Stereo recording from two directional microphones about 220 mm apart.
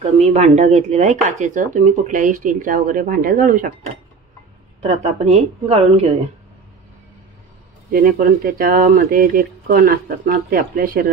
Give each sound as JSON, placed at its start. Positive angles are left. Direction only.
{"t": 0.3, "sound": "speech", "side_deg": -30}
{"t": 4.8, "sound": "a woman's voice", "side_deg": -30}
{"t": 7.9, "sound": "speech", "side_deg": -45}